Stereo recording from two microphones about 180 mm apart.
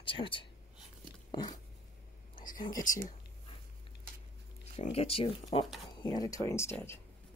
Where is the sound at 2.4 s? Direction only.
50° left (ahead or behind).